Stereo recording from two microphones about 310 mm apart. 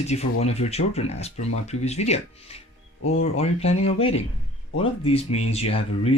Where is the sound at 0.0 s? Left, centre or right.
Left.